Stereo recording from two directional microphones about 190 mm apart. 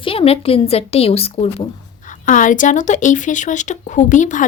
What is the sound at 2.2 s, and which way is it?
Speech, 45° left (ahead or behind).